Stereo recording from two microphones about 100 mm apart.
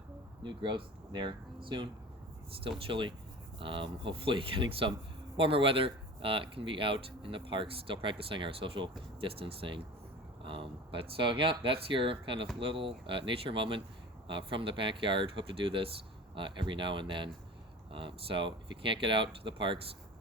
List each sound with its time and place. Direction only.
0.4 s speech: 50° right (ahead or behind)
2.5 s speech: 70° right (ahead or behind)